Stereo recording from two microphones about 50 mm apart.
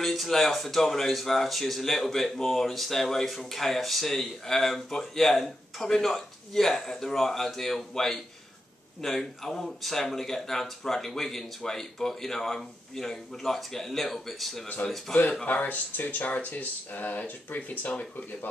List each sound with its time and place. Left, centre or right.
0.0 s speech: centre
14.8 s speech: left